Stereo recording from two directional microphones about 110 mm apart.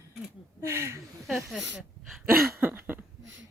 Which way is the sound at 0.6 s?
25° right (ahead or behind).